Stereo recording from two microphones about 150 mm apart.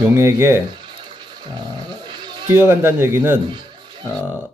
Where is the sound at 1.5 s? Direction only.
30° right (ahead or behind).